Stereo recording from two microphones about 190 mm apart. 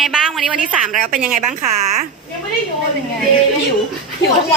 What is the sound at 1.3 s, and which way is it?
Speech, 35° right (ahead or behind).